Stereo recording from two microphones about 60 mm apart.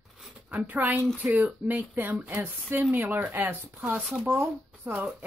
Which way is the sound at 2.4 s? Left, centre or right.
Right.